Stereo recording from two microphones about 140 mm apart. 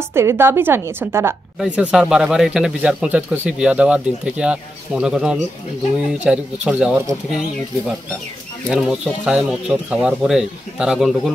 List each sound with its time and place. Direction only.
0.1 s speech: 20° right (ahead or behind)
1.6 s speech: 5° right (ahead or behind)
8.6 s speech: 5° right (ahead or behind)